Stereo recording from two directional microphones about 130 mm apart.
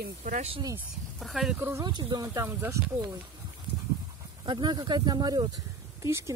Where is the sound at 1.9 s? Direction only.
35° right (ahead or behind); by 2.8 s 20° right (ahead or behind).